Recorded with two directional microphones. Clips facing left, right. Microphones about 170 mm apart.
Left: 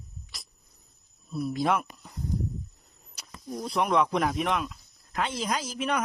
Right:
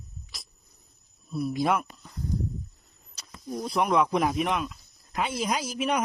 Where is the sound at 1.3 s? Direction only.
5° right (ahead or behind).